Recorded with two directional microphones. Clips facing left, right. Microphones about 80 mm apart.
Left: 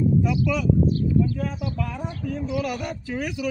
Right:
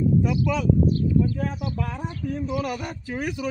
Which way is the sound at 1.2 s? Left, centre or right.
Right.